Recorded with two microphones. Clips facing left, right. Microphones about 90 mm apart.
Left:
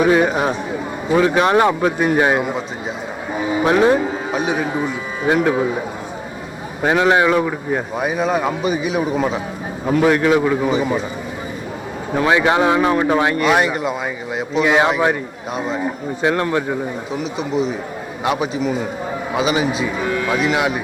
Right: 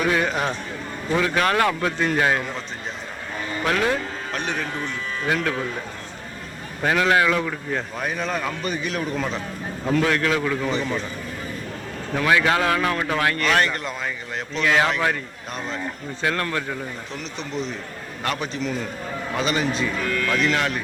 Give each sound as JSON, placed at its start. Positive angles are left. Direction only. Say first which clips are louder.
{"t": 0.0, "sound": "a man's voice", "louder": "left 7 dB", "side_deg": 20}
{"t": 3.3, "sound": "music", "louder": "left 10 dB", "side_deg": 10}
{"t": 3.6, "sound": "a man's voice", "louder": "left 8 dB", "side_deg": 20}
{"t": 6.8, "sound": "a man's voice", "louder": "left 5 dB", "side_deg": 20}
{"t": 10.7, "sound": "a man's voice", "louder": "left 6 dB", "side_deg": 10}
{"t": 12.1, "sound": "speech", "louder": "left 4 dB", "side_deg": 20}
{"t": 15.5, "sound": "a man's voice", "louder": "left 8 dB", "side_deg": 10}
{"t": 16.2, "sound": "speech", "louder": "left 7 dB", "side_deg": 20}
{"t": 17.1, "sound": "a man's voice", "louder": "left 9 dB", "side_deg": 5}